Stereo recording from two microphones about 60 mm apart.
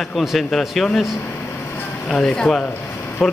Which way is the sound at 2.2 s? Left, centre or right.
Centre.